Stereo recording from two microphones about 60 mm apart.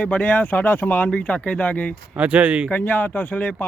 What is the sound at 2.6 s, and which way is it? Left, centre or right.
Speech, left.